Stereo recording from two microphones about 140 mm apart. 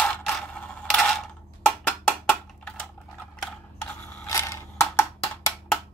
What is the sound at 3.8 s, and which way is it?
Mechanisms, 15° left (ahead or behind).